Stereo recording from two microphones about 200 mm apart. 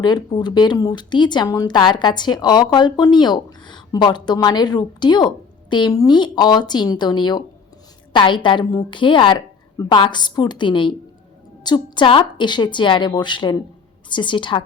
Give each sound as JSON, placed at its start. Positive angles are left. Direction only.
{"t": 0.0, "sound": "speech", "side_deg": 20}